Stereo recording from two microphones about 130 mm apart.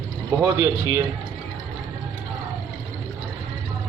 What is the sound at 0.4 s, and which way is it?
Speech, 25° right (ahead or behind).